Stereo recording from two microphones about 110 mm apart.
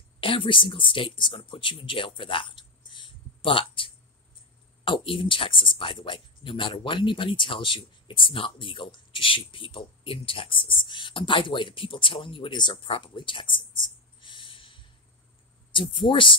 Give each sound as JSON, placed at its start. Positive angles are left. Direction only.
{"t": 0.2, "sound": "speech", "side_deg": 50}